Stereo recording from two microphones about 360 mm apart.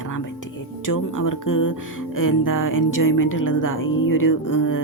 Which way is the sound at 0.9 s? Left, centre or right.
Left.